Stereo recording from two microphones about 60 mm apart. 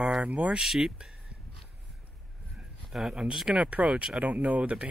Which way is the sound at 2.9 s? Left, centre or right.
Centre.